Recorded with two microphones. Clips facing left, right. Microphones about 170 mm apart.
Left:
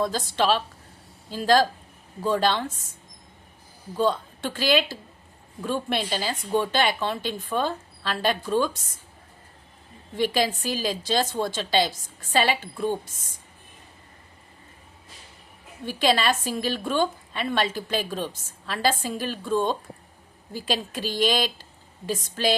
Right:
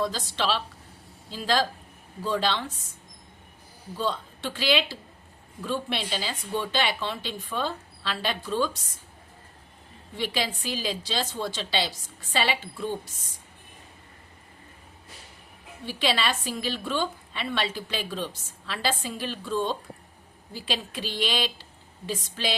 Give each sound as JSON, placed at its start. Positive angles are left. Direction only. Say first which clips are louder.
{"t": 0.0, "sound": "a woman's voice", "louder": "left 4 dB", "side_deg": 50}
{"t": 3.9, "sound": "a woman's voice", "louder": "left 6 dB", "side_deg": 50}
{"t": 10.2, "sound": "a woman's voice", "louder": "left 6 dB", "side_deg": 45}
{"t": 15.9, "sound": "a woman's voice", "louder": "left 4 dB", "side_deg": 45}